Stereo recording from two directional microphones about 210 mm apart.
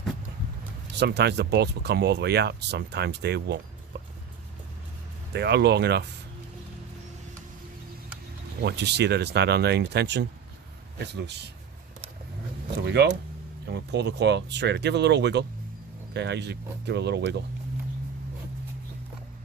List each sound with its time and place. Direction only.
0.9 s speech: 55° right (ahead or behind)
5.3 s speech: 50° right (ahead or behind)
8.6 s speech: 55° right (ahead or behind)
12.8 s speech: 55° right (ahead or behind)